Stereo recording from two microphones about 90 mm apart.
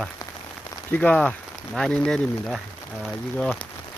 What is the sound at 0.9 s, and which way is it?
Speech, 15° left (ahead or behind).